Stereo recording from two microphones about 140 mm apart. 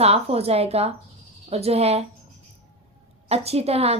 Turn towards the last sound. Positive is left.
turn(degrees=-45)  # may be behind; listen again after turning